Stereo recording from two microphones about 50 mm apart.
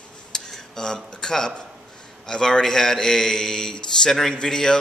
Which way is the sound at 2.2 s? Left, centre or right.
Centre.